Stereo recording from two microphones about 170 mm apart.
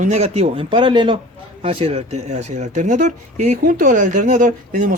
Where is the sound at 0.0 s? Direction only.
40° right (ahead or behind).